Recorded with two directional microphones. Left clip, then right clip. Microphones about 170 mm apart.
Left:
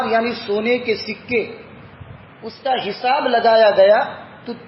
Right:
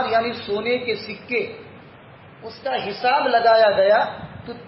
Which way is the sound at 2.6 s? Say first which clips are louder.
Left 3 dB; 45° left (ahead or behind).